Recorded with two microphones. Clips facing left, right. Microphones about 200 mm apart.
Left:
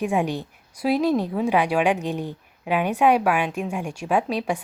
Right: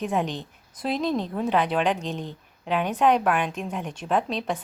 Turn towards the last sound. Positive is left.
turn(degrees=10)  # may be behind; listen again after turning